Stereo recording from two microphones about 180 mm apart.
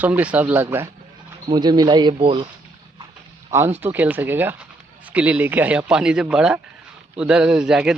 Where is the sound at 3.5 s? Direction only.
10° right (ahead or behind).